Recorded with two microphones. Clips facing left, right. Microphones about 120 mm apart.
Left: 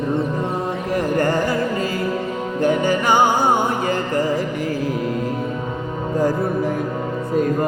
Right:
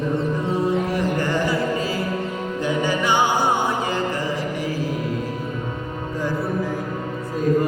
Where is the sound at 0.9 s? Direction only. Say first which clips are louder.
Left 3 dB; 45° left (ahead or behind).